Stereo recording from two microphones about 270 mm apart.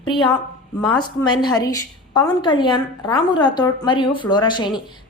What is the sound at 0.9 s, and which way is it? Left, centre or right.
A woman's voice, centre.